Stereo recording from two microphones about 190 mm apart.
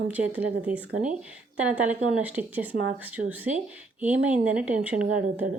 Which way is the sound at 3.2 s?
60° right (ahead or behind).